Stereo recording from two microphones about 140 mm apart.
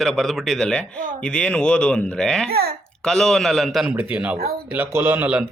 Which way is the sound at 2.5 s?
90° right.